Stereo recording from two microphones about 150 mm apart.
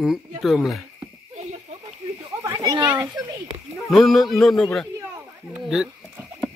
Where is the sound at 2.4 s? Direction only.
25° right (ahead or behind).